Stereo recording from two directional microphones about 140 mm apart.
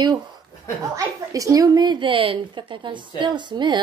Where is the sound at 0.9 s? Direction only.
25° right (ahead or behind).